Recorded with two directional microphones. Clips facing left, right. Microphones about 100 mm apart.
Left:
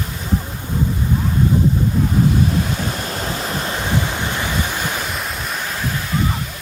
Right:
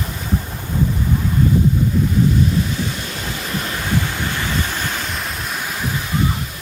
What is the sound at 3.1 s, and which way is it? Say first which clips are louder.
Waves: left 2 dB; 35° left (ahead or behind).